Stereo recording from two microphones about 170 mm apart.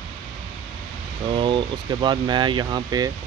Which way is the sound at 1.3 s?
30° right (ahead or behind).